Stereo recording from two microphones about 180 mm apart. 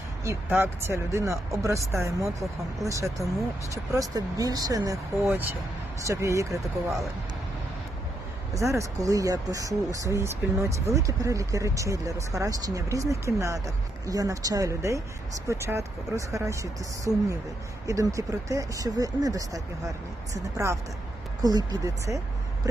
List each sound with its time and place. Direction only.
0.3 s speech: 10° right (ahead or behind)
6.5 s speech: centre (ahead or behind)
8.7 s speech: 20° right (ahead or behind)
17.1 s speech: 15° right (ahead or behind)